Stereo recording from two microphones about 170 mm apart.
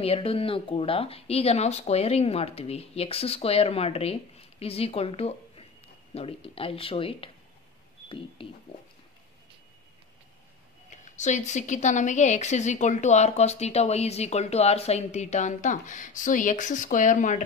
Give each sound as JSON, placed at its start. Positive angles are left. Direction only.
{"t": 0.0, "sound": "speech", "side_deg": 35}
{"t": 8.4, "sound": "speech", "side_deg": 30}
{"t": 10.9, "sound": "a woman's voice", "side_deg": 45}